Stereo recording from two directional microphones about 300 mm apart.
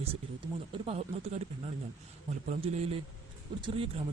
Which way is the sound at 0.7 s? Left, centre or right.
Centre.